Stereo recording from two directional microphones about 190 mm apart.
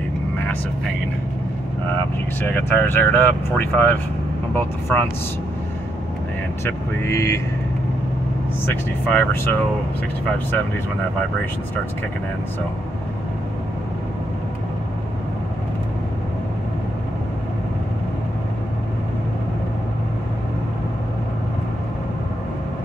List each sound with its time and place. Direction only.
2.4 s speech: 10° left (ahead or behind)
6.6 s speech: 15° left (ahead or behind)
8.6 s speech: 10° left (ahead or behind)